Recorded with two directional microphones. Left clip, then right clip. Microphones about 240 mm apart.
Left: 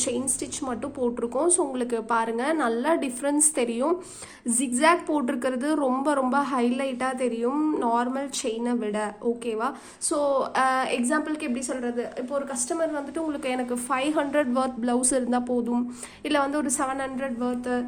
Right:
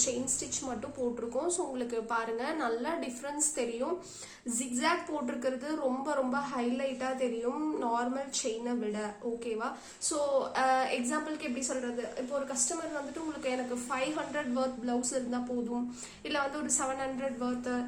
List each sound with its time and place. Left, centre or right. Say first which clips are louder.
1.4 s a woman's voice: left 10 dB; left
13.4 s a woman's voice: left 6 dB; left